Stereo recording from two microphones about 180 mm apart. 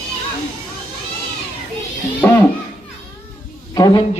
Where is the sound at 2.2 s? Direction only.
15° left (ahead or behind).